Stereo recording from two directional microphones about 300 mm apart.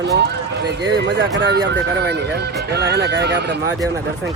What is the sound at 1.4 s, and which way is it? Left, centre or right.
Speech, right.